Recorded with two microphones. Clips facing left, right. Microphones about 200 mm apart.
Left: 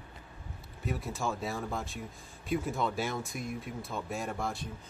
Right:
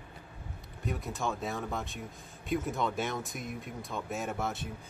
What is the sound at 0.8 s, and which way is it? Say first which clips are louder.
Speech: even; centre (ahead or behind).